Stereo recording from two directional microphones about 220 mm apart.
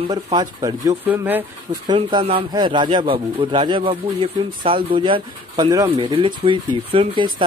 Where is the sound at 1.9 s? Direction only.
25° right (ahead or behind).